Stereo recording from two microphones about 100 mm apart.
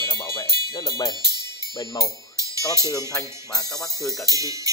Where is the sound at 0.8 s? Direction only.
40° left (ahead or behind).